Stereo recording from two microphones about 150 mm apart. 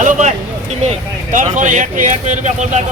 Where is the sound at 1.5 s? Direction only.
55° right (ahead or behind).